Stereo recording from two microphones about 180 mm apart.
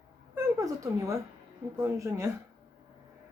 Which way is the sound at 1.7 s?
20° right (ahead or behind).